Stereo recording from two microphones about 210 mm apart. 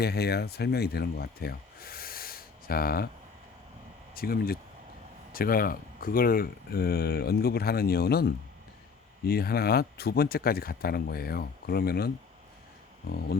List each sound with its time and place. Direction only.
0.0 s speech: 50° left (ahead or behind)
4.1 s speech: 45° left (ahead or behind)